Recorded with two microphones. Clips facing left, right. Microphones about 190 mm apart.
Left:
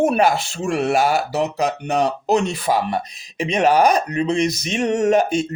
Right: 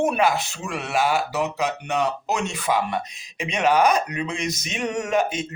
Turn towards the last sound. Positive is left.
turn(degrees=40)  # may be behind; listen again after turning